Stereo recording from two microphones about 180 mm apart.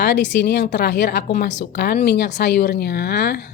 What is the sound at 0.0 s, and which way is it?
A woman's voice, 75° left (ahead or behind).